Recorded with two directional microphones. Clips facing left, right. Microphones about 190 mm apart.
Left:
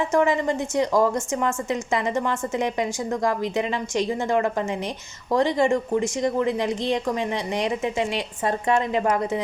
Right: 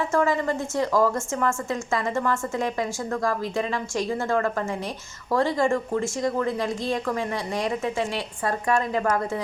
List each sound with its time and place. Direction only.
0.1 s a woman's voice: 20° left (ahead or behind)